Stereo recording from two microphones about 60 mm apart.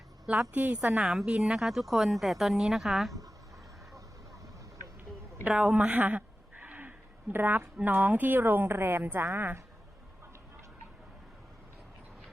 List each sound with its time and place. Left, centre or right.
0.5 s a woman's voice: right
0.9 s a woman's voice: centre
5.5 s a woman's voice: centre
6.0 s a sound: right
7.3 s a woman's voice: right